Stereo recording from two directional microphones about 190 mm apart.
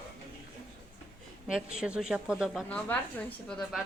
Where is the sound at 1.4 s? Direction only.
5° right (ahead or behind).